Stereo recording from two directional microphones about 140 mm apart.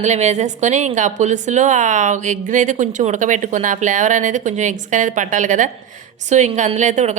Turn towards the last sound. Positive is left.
turn(degrees=-60)  # may be behind; listen again after turning